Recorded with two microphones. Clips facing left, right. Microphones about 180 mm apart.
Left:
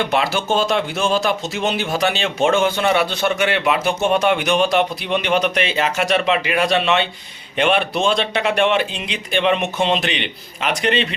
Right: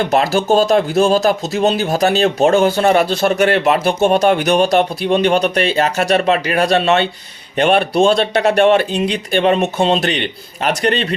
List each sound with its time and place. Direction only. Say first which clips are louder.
0.0 s speech: right 5 dB; 40° right (ahead or behind)